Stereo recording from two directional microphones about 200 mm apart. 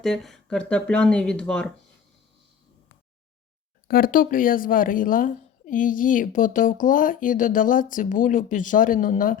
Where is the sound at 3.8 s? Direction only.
45° left (ahead or behind).